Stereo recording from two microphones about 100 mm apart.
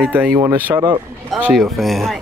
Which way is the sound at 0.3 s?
35° right (ahead or behind).